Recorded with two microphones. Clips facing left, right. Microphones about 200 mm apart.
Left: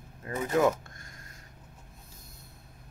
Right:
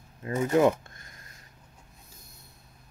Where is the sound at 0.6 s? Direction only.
15° right (ahead or behind).